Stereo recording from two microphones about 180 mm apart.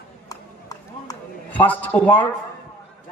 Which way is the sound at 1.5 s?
10° left (ahead or behind).